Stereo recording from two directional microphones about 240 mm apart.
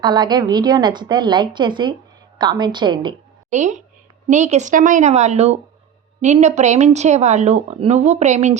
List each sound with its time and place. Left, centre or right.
0.0 s a woman's voice: centre
3.5 s speech: right